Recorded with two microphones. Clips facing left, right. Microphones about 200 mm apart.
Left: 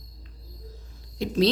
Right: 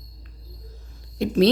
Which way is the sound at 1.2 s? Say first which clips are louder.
Right 4 dB; 55° right (ahead or behind).